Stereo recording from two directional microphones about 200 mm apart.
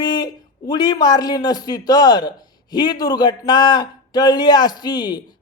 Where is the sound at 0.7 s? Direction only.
20° left (ahead or behind).